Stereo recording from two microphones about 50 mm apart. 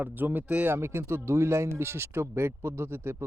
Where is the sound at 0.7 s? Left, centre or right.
Right.